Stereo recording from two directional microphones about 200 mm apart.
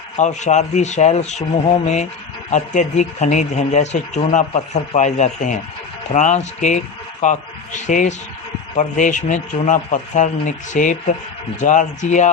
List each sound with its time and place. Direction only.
0.2 s speech: 35° left (ahead or behind)